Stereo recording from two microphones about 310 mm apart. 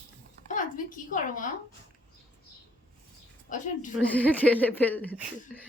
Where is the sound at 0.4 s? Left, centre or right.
Left.